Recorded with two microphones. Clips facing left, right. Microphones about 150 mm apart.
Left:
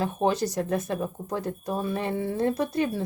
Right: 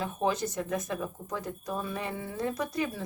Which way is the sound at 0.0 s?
35° left (ahead or behind).